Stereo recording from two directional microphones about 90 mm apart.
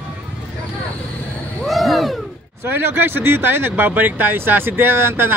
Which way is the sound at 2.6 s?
25° right (ahead or behind).